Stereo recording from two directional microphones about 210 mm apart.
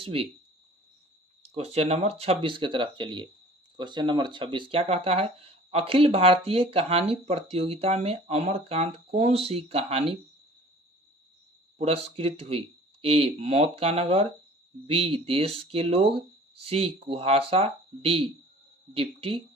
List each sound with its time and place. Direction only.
0.0 s speech: 25° right (ahead or behind)
1.4 s speech: 30° right (ahead or behind)
11.8 s speech: 30° right (ahead or behind)